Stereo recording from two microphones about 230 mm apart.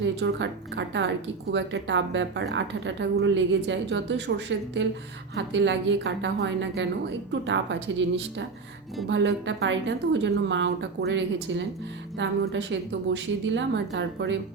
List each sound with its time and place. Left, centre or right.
0.0 s a woman's voice: right